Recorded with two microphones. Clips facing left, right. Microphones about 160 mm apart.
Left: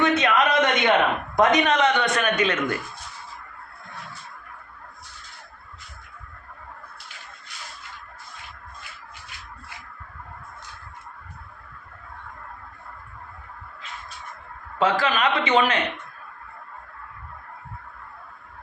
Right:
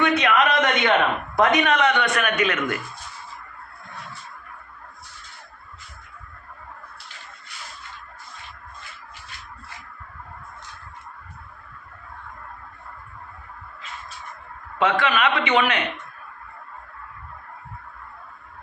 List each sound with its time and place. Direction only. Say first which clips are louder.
0.0 s a sound: right 1 dB; 20° left (ahead or behind)
1.4 s speech: even; 20° left (ahead or behind)
14.8 s a man's voice: right 1 dB; 35° left (ahead or behind)